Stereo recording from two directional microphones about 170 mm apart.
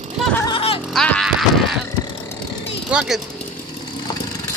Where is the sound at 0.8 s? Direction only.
5° left (ahead or behind).